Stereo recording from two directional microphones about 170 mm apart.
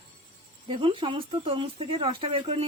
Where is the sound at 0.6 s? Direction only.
30° right (ahead or behind).